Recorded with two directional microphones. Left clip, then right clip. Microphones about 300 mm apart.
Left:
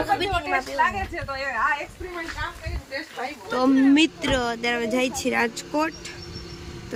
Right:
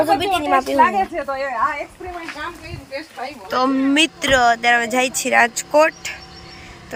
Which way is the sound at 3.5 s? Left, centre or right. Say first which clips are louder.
Right 2 dB; centre.